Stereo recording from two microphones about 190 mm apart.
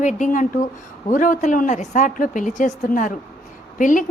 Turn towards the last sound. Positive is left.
turn(degrees=45)  # may be behind; listen again after turning